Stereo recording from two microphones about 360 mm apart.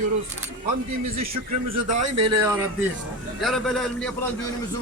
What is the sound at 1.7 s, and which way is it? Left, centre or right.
Speech, centre.